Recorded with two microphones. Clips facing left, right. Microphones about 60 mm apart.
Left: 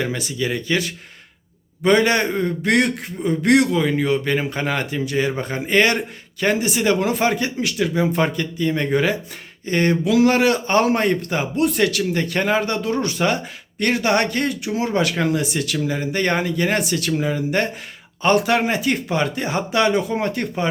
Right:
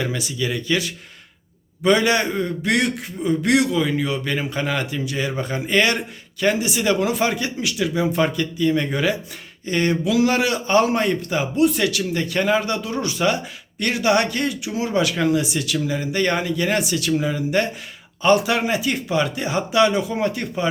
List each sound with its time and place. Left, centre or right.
0.0 s speech: left